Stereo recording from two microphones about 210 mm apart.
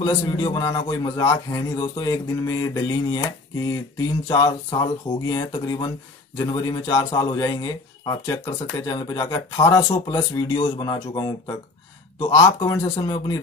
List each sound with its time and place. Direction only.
0.0 s a man's voice: 20° left (ahead or behind)